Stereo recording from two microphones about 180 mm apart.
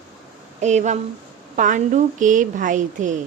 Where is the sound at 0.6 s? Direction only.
40° right (ahead or behind).